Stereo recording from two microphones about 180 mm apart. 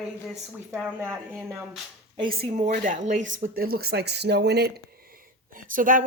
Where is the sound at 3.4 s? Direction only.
55° right (ahead or behind).